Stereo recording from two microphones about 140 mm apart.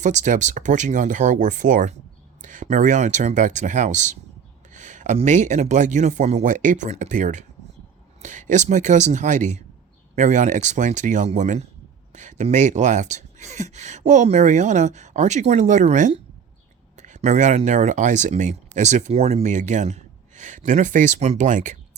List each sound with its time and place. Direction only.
0.0 s speech: 60° right (ahead or behind)